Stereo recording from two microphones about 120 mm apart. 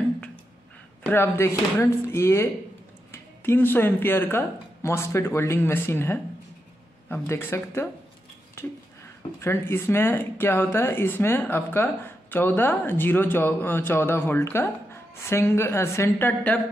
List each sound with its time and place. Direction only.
1.0 s speech: 20° left (ahead or behind)